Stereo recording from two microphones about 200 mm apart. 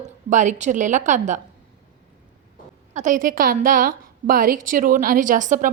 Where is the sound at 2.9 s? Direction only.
40° right (ahead or behind).